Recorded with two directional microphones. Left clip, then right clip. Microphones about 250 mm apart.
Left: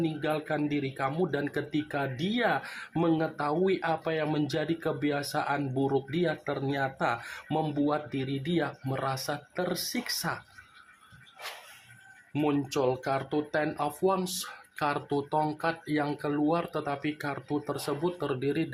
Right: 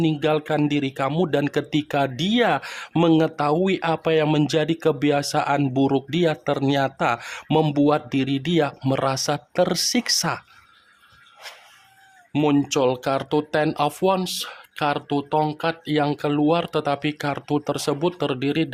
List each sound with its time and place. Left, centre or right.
0.0 s speech: right
12.3 s speech: right